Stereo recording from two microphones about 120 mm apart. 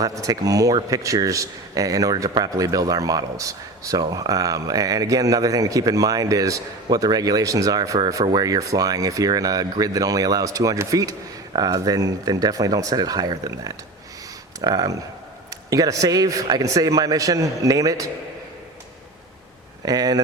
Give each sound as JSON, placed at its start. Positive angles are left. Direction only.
{"t": 0.0, "sound": "a man's voice", "side_deg": -30}
{"t": 19.8, "sound": "speech", "side_deg": -30}